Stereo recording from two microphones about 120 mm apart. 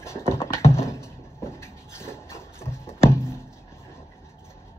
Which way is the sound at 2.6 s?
20° left (ahead or behind).